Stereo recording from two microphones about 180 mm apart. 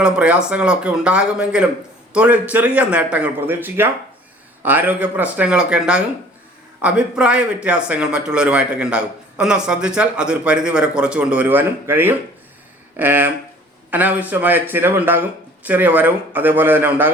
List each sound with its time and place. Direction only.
0.0 s a man's voice: 5° right (ahead or behind)